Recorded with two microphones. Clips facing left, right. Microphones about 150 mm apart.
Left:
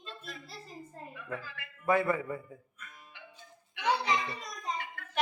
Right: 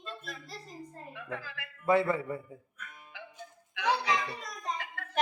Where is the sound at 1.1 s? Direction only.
90° right.